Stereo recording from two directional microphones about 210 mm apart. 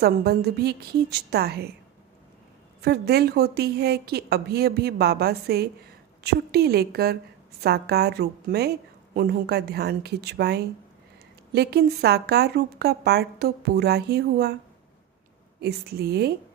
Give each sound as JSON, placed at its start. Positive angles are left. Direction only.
{"t": 0.0, "sound": "a woman's voice", "side_deg": -50}
{"t": 2.8, "sound": "a woman's voice", "side_deg": -50}
{"t": 15.6, "sound": "a woman's voice", "side_deg": -50}